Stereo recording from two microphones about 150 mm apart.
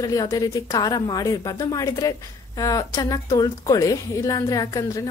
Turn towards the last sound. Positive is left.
turn(degrees=20)  # may be behind; listen again after turning